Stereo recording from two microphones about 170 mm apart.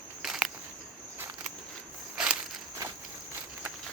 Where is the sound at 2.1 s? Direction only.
5° right (ahead or behind).